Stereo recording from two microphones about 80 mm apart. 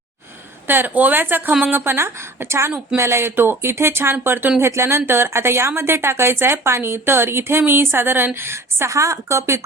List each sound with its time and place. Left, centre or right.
0.7 s a woman's voice: right